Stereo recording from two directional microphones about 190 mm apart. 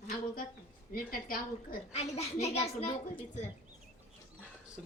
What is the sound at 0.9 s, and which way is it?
Speech, 50° left (ahead or behind).